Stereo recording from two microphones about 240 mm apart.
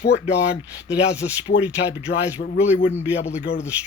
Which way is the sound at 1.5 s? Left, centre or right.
Left.